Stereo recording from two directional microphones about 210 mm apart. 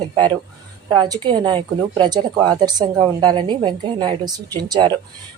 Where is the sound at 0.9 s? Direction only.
20° right (ahead or behind).